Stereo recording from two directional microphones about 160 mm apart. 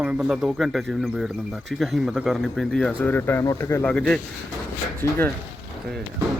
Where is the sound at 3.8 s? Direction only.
5° left (ahead or behind).